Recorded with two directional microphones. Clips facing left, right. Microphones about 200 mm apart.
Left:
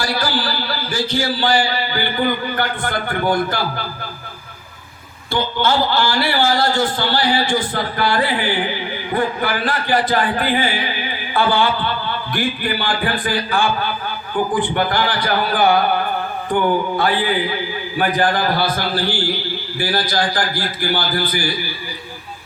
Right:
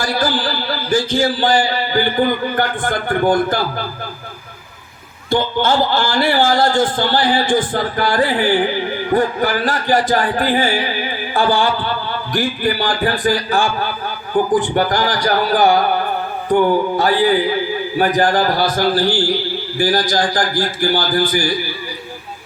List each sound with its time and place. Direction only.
0.0 s a sound: 50° right (ahead or behind)
1.4 s a man's voice: 50° right (ahead or behind)
5.3 s a man's voice: 50° right (ahead or behind)
17.0 s a man's voice: 40° right (ahead or behind)